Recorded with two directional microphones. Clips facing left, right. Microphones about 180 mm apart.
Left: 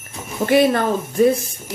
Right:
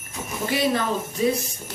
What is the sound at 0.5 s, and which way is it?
Speech, 55° left (ahead or behind).